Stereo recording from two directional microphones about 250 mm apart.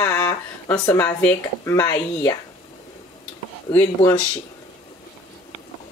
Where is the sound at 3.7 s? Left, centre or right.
Centre.